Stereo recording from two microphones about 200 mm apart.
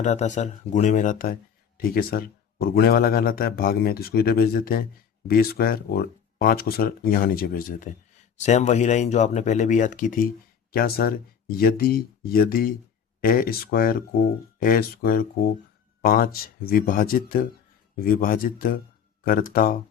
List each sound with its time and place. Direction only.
0.0 s a man's voice: 35° left (ahead or behind)
8.4 s a man's voice: 35° left (ahead or behind)